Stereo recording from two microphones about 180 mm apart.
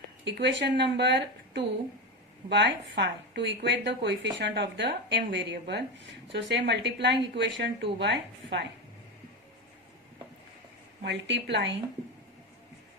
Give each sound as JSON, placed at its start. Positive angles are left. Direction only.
{"t": 0.3, "sound": "a woman's voice", "side_deg": -75}
{"t": 11.0, "sound": "a woman's voice", "side_deg": -80}